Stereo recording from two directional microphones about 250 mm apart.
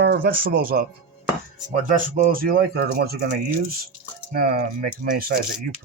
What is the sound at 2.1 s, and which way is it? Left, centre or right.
Speech, right.